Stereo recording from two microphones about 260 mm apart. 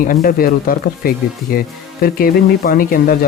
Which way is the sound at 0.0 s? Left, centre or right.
Left.